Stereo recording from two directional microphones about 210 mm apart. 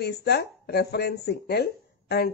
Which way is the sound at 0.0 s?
50° left (ahead or behind).